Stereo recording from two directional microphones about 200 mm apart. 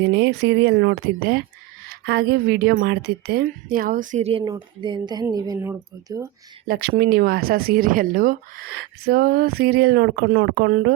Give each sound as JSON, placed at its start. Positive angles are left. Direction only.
{"t": 0.1, "sound": "speech", "side_deg": -65}
{"t": 6.7, "sound": "speech", "side_deg": -50}
{"t": 10.7, "sound": "speech", "side_deg": -45}